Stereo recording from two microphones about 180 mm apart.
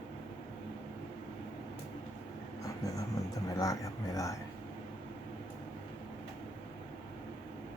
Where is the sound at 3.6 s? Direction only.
20° left (ahead or behind).